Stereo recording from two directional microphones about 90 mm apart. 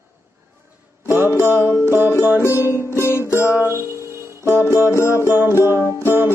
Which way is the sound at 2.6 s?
30° left (ahead or behind).